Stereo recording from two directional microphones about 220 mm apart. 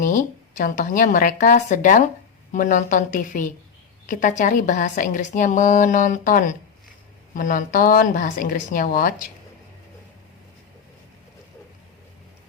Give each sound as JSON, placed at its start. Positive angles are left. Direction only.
{"t": 0.0, "sound": "a woman's voice", "side_deg": 35}